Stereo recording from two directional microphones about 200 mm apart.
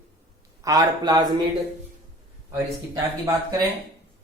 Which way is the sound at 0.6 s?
15° right (ahead or behind).